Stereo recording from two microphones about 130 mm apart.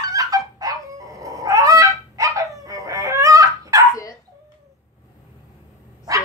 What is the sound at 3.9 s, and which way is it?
Dog, 25° left (ahead or behind).